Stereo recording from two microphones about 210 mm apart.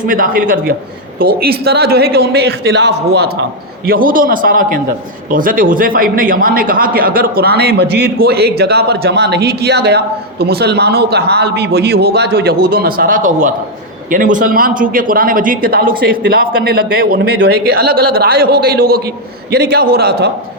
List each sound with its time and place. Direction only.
0.0 s a man's voice: 40° right (ahead or behind)